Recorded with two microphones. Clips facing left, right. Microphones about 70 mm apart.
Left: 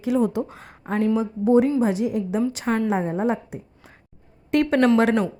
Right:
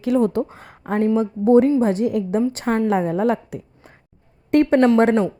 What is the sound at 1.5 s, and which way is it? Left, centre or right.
A woman's voice, right.